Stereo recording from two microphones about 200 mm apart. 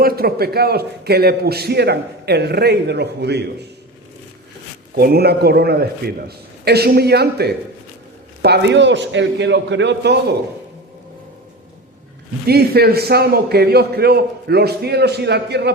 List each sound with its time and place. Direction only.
0.0 s a man's voice: 50° right (ahead or behind)
4.9 s a man's voice: 50° right (ahead or behind)
12.5 s a man's voice: 50° right (ahead or behind)